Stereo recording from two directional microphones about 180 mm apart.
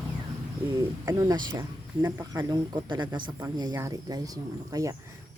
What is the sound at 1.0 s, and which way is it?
Speech, 20° right (ahead or behind).